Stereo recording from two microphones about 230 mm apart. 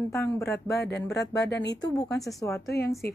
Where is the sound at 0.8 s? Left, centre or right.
Left.